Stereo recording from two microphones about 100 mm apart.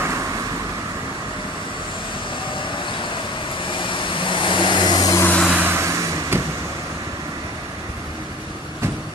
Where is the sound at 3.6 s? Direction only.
55° left (ahead or behind).